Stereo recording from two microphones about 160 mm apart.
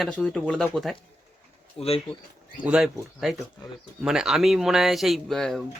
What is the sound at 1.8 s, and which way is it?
Speech, 40° left (ahead or behind).